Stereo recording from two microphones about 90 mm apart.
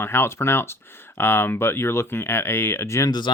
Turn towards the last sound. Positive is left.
turn(degrees=55)  # may be behind; listen again after turning